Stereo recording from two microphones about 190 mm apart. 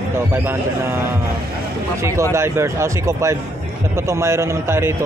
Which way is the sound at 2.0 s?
15° right (ahead or behind).